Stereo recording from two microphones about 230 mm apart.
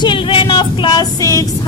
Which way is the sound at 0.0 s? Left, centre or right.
Left.